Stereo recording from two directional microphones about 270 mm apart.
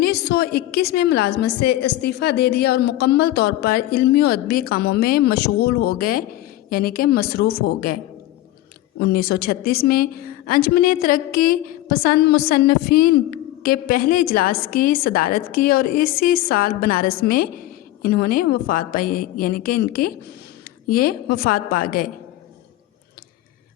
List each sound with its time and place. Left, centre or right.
0.0 s a woman's voice: left
9.0 s a woman's voice: left